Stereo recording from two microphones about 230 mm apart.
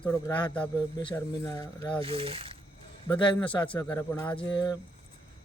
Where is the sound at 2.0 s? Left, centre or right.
Right.